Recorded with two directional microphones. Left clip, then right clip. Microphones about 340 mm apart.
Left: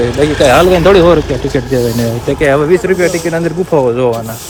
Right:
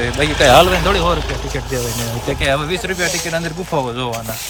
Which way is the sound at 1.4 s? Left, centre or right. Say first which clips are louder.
Left 9 dB; right.